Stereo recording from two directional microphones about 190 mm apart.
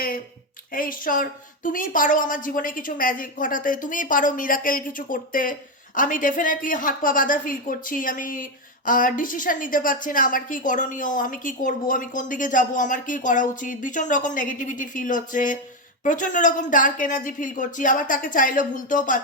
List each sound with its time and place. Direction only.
0.7 s a woman's voice: 45° left (ahead or behind)